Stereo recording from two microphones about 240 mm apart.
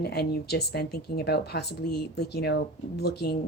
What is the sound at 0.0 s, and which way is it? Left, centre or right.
Speech, left.